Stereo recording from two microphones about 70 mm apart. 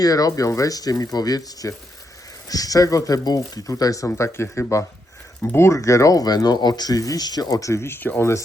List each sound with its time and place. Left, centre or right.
0.0 s speech: left